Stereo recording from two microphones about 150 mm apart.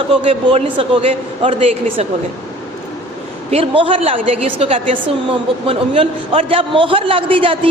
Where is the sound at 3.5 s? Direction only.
40° right (ahead or behind).